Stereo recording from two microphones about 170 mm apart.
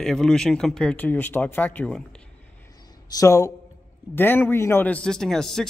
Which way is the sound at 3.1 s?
20° left (ahead or behind).